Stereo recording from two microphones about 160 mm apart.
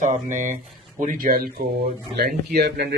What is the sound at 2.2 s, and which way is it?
Speech, 90° right.